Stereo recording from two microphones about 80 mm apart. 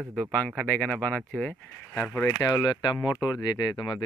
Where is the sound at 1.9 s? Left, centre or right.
Left.